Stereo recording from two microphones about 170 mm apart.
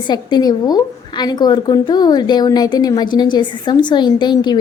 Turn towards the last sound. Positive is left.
turn(degrees=25)  # may be behind; listen again after turning